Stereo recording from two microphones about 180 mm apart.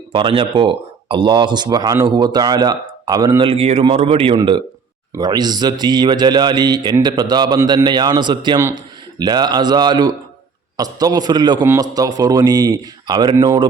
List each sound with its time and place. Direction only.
0.1 s speech: 30° right (ahead or behind)